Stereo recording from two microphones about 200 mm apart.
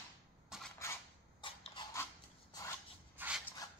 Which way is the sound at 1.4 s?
25° left (ahead or behind).